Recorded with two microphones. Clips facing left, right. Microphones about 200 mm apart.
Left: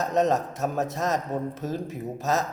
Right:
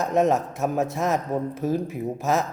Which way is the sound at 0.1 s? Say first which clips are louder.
Right 3 dB; 15° right (ahead or behind).